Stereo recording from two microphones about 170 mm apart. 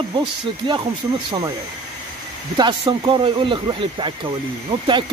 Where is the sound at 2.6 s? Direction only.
25° right (ahead or behind).